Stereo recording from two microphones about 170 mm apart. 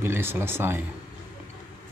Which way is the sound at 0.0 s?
15° right (ahead or behind).